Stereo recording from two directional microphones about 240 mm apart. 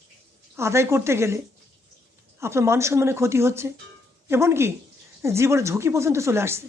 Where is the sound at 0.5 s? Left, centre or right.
Centre.